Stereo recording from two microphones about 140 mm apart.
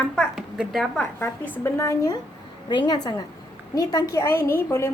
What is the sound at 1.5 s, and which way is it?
A woman's voice, 20° left (ahead or behind).